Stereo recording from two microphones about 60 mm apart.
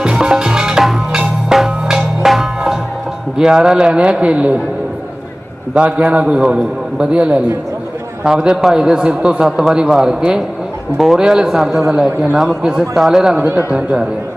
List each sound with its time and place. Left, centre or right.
0.0 s music: centre
3.3 s a man's voice: centre
5.7 s a man's voice: centre